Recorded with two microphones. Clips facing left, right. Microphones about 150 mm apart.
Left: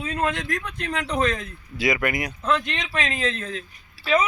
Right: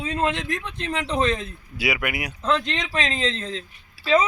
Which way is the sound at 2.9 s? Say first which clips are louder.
Even; 30° right (ahead or behind).